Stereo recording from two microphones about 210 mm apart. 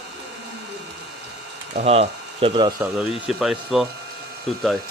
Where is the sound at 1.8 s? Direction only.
30° right (ahead or behind).